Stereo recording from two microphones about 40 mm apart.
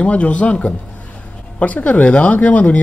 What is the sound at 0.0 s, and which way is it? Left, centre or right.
Speech, left.